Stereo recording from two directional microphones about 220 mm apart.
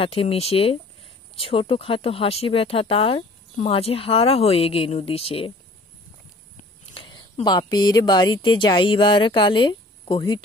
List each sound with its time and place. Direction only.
0.0 s speech: 25° left (ahead or behind)
6.9 s speech: 20° left (ahead or behind)